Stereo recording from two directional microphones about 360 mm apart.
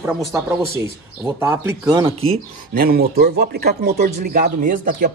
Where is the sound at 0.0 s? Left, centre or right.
Centre.